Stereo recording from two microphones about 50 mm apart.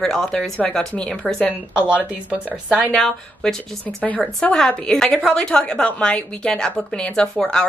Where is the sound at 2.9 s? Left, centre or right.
Centre.